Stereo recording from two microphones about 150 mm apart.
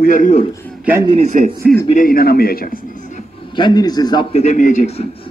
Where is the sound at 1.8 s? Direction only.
65° left (ahead or behind).